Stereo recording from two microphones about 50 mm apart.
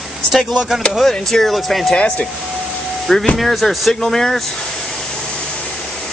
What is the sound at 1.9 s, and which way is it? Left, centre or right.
Speech, left.